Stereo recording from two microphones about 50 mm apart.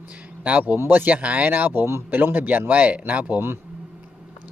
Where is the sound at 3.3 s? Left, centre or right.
Right.